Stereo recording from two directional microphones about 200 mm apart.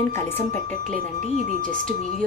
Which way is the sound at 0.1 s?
10° left (ahead or behind).